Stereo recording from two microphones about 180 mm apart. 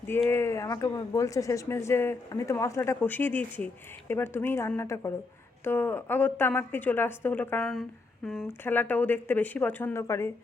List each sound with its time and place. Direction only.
0.3 s a woman's voice: 15° left (ahead or behind)